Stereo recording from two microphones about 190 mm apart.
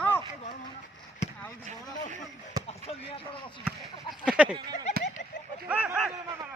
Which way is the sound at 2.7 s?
30° left (ahead or behind).